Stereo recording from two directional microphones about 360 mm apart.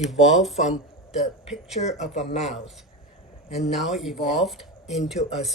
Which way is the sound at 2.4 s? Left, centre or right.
Centre.